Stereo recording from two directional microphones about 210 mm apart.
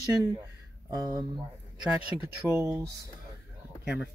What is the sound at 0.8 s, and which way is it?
Speech, 15° right (ahead or behind).